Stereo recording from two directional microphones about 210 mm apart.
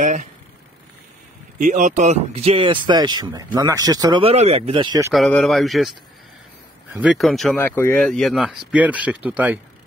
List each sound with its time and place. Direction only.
0.0 s speech: 35° right (ahead or behind)
1.6 s speech: 35° right (ahead or behind); by 5.1 s 20° right (ahead or behind)
5.1 s speech: centre (ahead or behind)